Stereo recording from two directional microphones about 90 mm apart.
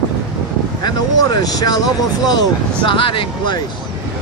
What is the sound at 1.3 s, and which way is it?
Speech, 45° left (ahead or behind).